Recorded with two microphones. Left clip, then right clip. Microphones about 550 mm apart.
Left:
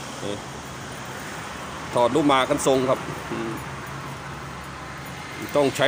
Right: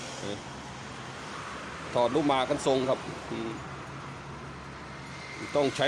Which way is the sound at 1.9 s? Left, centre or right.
Right.